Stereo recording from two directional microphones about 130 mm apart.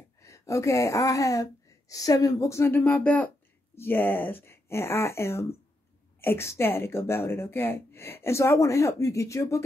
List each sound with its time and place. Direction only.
0.2 s speech: 25° left (ahead or behind)